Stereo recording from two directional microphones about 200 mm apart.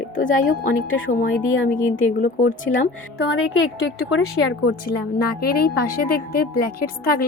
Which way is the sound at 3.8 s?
90° left.